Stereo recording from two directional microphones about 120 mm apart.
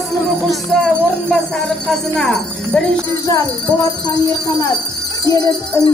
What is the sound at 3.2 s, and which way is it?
Music, 30° left (ahead or behind).